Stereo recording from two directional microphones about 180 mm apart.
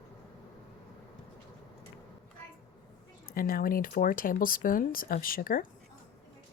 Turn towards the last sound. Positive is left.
turn(degrees=50)  # may be behind; listen again after turning